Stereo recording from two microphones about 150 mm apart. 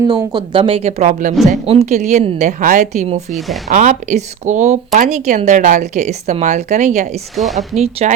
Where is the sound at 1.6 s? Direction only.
45° right (ahead or behind).